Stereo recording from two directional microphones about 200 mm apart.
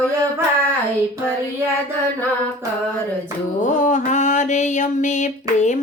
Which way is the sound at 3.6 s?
40° left (ahead or behind).